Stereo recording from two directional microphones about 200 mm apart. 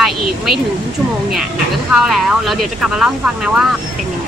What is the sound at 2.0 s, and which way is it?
Speech, centre (ahead or behind).